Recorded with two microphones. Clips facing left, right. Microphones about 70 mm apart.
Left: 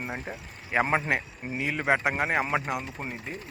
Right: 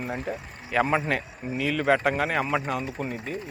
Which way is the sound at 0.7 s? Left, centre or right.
Left.